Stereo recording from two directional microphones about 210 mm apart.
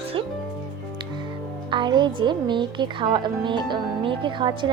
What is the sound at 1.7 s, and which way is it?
Speech, 20° right (ahead or behind).